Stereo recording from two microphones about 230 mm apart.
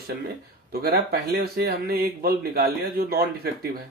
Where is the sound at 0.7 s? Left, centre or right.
Right.